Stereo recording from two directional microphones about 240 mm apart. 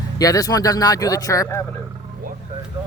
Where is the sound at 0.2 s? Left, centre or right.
Centre.